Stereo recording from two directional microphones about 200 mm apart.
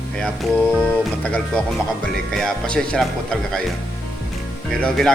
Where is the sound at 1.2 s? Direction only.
5° left (ahead or behind).